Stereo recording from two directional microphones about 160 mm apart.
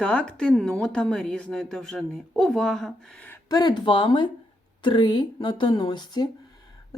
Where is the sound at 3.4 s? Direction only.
25° left (ahead or behind).